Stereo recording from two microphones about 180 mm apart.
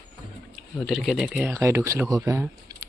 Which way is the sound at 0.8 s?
Centre (ahead or behind).